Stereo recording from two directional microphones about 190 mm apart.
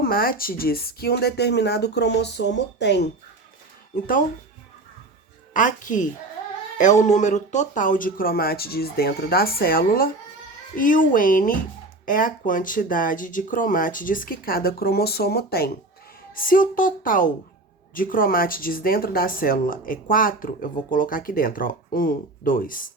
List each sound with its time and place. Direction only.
0.0 s speech: 50° left (ahead or behind)
5.5 s speech: 45° left (ahead or behind)